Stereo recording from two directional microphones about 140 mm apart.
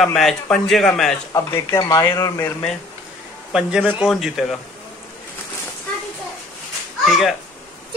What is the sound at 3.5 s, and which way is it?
Speech, 5° right (ahead or behind).